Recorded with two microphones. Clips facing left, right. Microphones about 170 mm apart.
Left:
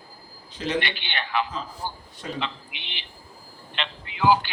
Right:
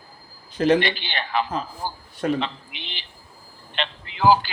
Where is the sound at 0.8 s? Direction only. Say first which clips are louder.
Right 4 dB; 35° right (ahead or behind).